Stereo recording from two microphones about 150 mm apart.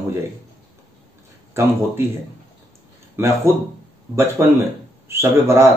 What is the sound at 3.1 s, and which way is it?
Speech, 15° right (ahead or behind).